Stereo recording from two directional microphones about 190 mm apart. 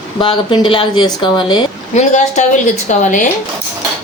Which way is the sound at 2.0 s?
40° left (ahead or behind).